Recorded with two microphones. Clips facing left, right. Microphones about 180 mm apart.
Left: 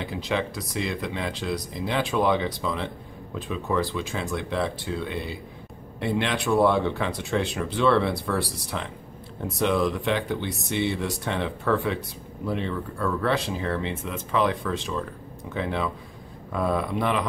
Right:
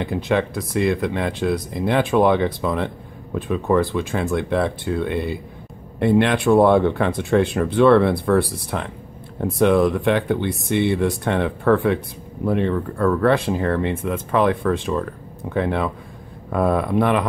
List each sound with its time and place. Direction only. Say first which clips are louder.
0.0 s speech: right 7 dB; 55° right (ahead or behind)